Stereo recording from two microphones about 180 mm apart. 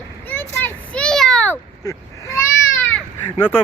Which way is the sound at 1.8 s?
20° left (ahead or behind).